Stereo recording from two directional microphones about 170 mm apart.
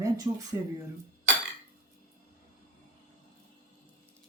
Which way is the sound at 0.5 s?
20° right (ahead or behind).